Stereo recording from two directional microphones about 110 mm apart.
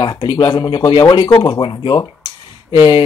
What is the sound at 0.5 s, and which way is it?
Speech, 35° left (ahead or behind).